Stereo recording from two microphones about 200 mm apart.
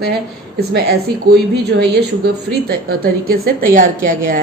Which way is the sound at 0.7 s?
50° right (ahead or behind).